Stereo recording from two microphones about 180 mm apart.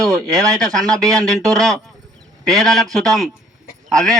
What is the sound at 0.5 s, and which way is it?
Speech, centre (ahead or behind).